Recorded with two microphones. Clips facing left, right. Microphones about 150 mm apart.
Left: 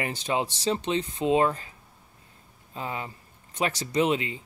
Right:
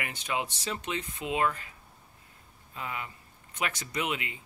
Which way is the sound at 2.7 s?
30° left (ahead or behind).